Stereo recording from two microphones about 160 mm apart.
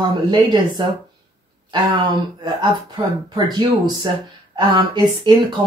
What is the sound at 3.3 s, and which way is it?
Speech, 25° right (ahead or behind).